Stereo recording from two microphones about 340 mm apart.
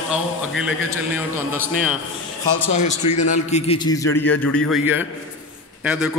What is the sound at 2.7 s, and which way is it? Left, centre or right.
A man's voice, left.